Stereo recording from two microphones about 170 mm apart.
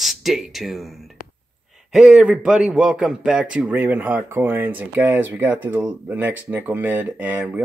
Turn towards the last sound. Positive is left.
turn(degrees=-10)  # may be behind; listen again after turning